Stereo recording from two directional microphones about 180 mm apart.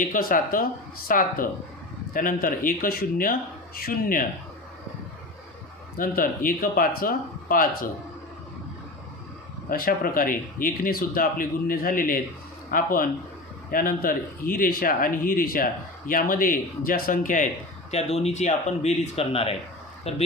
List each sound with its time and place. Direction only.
0.0 s speech: 50° left (ahead or behind)
6.0 s speech: 50° left (ahead or behind)
9.6 s speech: 55° left (ahead or behind)
17.9 s speech: 35° left (ahead or behind)